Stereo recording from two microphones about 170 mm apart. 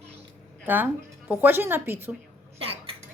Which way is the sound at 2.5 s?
35° right (ahead or behind).